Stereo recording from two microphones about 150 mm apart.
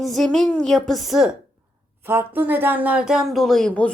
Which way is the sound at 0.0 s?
Centre (ahead or behind).